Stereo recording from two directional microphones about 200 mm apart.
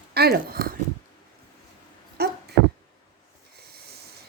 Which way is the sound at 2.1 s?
55° right (ahead or behind).